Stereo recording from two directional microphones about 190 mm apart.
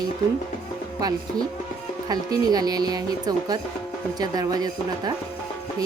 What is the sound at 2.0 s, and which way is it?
Speech, 20° right (ahead or behind).